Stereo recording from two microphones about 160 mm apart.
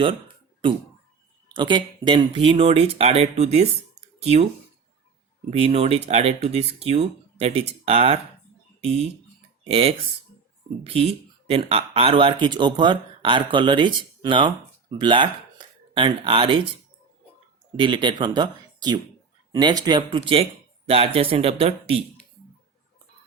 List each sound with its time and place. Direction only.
1.5 s speech: 30° right (ahead or behind)
5.5 s speech: 35° right (ahead or behind)
17.7 s speech: 30° right (ahead or behind)